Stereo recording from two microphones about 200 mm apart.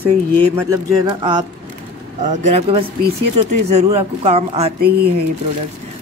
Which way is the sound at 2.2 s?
35° right (ahead or behind).